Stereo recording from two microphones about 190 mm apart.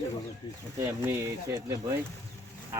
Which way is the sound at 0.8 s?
15° right (ahead or behind).